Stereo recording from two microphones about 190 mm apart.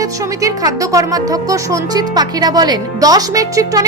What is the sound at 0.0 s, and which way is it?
A man's voice, 20° right (ahead or behind).